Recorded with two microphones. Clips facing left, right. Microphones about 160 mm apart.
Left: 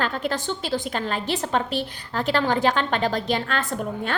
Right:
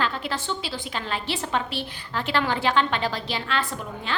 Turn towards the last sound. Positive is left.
turn(degrees=50)  # may be behind; listen again after turning